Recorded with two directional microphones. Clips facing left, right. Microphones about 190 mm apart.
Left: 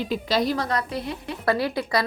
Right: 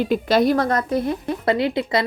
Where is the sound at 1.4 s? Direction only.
20° right (ahead or behind).